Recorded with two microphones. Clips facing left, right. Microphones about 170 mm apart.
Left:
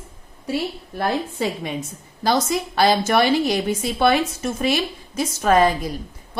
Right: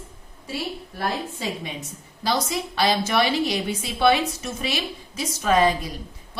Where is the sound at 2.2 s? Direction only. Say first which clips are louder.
Left 5 dB; 50° left (ahead or behind).